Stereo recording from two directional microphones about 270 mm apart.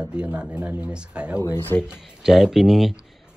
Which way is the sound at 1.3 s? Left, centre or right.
Centre.